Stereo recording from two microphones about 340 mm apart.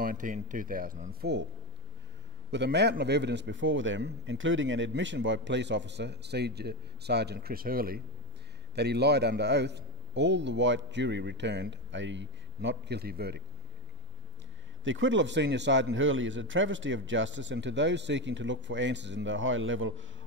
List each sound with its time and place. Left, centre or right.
0.0 s speech: right
2.5 s a man's voice: right
14.9 s a man's voice: right